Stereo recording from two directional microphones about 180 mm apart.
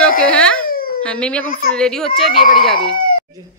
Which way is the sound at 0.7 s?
55° left (ahead or behind).